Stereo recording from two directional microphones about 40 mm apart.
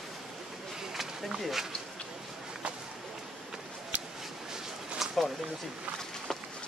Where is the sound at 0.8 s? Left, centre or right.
Centre.